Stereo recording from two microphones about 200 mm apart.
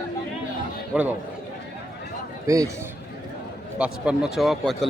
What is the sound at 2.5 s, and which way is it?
Speech, 15° right (ahead or behind).